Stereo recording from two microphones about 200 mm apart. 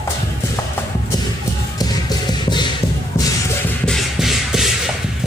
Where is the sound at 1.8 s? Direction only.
20° left (ahead or behind).